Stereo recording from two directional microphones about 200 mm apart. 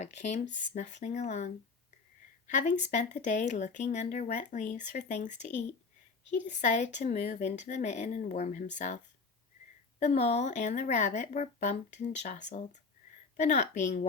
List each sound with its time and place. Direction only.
0.0 s speech: 35° left (ahead or behind)
10.0 s speech: 30° left (ahead or behind)